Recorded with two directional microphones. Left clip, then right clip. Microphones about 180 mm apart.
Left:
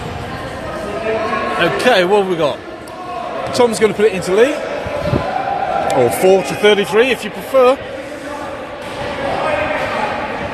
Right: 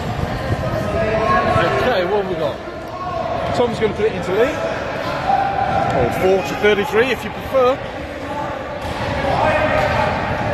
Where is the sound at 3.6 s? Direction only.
50° left (ahead or behind).